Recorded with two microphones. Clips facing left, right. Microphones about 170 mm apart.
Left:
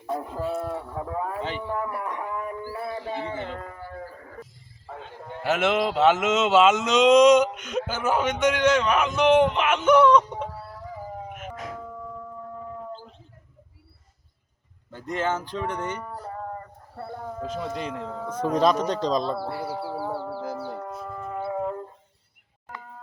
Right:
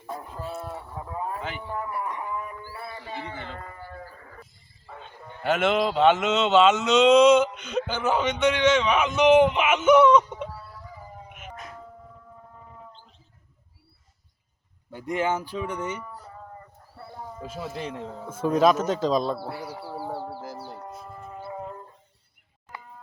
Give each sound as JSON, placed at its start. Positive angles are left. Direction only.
{"t": 0.3, "sound": "speech", "side_deg": 70}
{"t": 1.4, "sound": "speech", "side_deg": 30}
{"t": 1.7, "sound": "a sound", "side_deg": 65}
{"t": 4.9, "sound": "cattle", "side_deg": 85}
{"t": 5.4, "sound": "speech", "side_deg": 5}
{"t": 11.5, "sound": "siren", "side_deg": 90}
{"t": 14.9, "sound": "speech", "side_deg": -10}
{"t": 16.0, "sound": "a sound", "side_deg": 60}
{"t": 17.4, "sound": "speech", "side_deg": -10}
{"t": 17.7, "sound": "speech", "side_deg": 85}
{"t": 18.3, "sound": "speech", "side_deg": -5}
{"t": 19.4, "sound": "a sound", "side_deg": 80}